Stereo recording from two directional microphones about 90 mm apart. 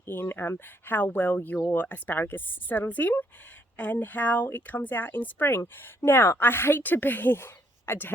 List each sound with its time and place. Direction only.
0.0 s speech: 25° left (ahead or behind)